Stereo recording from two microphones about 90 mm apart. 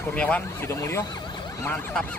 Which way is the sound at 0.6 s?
30° left (ahead or behind).